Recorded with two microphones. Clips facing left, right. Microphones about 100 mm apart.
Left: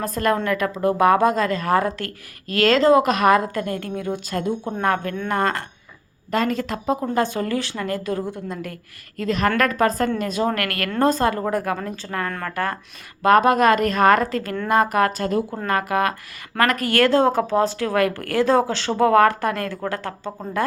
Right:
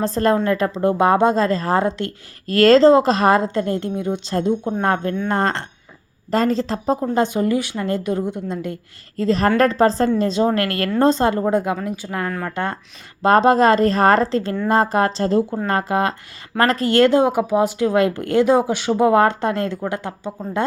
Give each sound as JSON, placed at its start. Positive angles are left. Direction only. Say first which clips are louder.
{"t": 0.0, "sound": "speech", "louder": "right 4 dB", "side_deg": -30}
{"t": 2.5, "sound": "speech", "louder": "right 5 dB", "side_deg": -40}
{"t": 7.1, "sound": "speech", "louder": "right 4 dB", "side_deg": -20}